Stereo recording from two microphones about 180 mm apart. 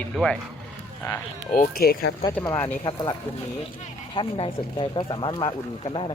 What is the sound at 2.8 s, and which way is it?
Speech, 25° left (ahead or behind).